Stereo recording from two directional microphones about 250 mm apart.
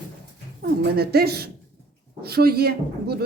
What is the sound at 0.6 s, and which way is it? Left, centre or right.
Speech, right.